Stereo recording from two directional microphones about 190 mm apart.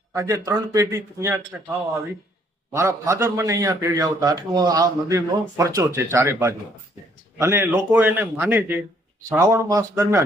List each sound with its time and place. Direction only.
0.1 s a man's voice: 15° right (ahead or behind)
2.7 s a man's voice: 15° right (ahead or behind)